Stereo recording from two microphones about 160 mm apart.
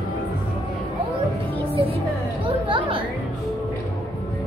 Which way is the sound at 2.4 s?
30° right (ahead or behind).